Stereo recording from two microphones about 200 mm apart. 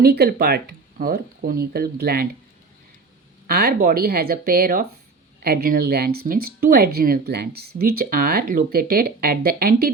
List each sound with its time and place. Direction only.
0.0 s speech: 50° right (ahead or behind)
3.4 s speech: 50° right (ahead or behind)